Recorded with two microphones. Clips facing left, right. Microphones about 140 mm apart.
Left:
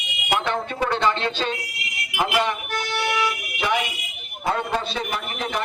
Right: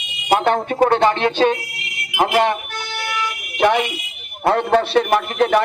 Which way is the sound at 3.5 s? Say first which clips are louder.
Right 10 dB; 60° right (ahead or behind).